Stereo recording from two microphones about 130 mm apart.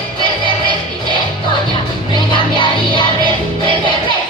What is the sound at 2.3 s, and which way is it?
Music, 40° left (ahead or behind).